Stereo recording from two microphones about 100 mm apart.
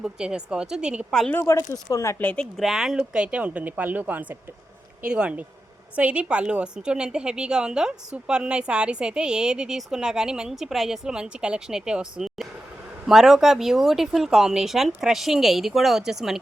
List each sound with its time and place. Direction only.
0.0 s a woman's voice: 10° right (ahead or behind)
1.3 s speech: 20° left (ahead or behind)
1.5 s speech: 35° left (ahead or behind)
2.1 s a woman's voice: 15° left (ahead or behind); by 16.4 s 5° right (ahead or behind)